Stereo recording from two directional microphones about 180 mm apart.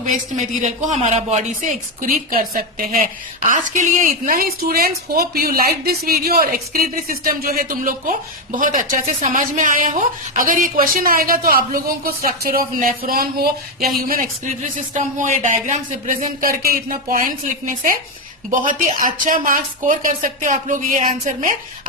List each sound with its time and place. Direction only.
0.0 s a man's voice: 40° right (ahead or behind)